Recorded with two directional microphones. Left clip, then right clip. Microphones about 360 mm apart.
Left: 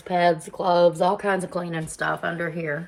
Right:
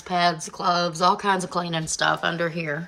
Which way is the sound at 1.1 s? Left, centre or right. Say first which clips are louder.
Right 1 dB; right.